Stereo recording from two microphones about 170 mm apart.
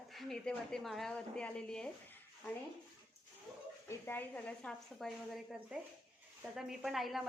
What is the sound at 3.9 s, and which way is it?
A woman's voice, 10° left (ahead or behind).